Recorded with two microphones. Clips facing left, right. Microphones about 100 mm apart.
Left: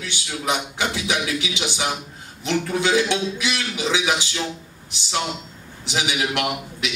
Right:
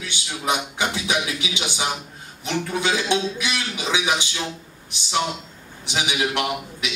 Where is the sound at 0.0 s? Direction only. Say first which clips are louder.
Even; 20° right (ahead or behind).